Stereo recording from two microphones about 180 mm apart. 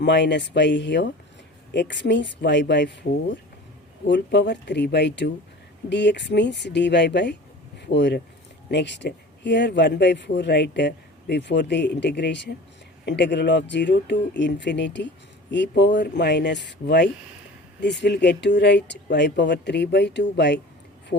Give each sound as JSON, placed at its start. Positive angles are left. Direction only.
{"t": 0.0, "sound": "speech", "side_deg": 75}